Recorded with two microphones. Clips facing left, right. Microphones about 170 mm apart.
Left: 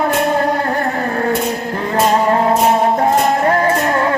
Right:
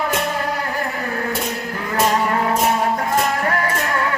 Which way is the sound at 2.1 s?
40° left (ahead or behind).